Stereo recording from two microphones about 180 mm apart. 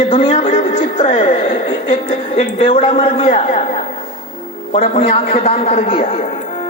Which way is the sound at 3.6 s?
35° left (ahead or behind).